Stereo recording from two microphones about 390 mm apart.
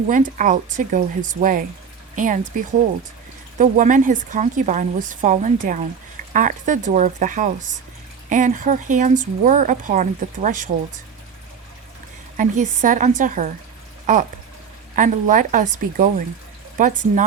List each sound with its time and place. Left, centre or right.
0.1 s speech: centre
12.4 s speech: centre
14.9 s speech: centre